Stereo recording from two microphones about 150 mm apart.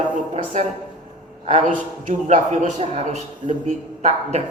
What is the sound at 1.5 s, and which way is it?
A man's voice, 55° right (ahead or behind).